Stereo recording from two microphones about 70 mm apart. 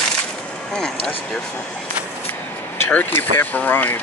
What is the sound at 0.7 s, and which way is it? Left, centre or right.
Speech, centre.